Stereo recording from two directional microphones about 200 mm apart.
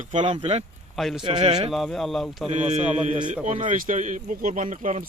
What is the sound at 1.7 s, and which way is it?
Speech, centre (ahead or behind).